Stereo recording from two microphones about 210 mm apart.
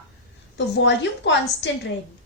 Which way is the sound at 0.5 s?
55° left (ahead or behind).